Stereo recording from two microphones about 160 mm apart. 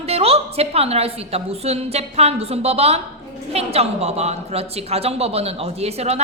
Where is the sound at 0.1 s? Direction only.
40° right (ahead or behind).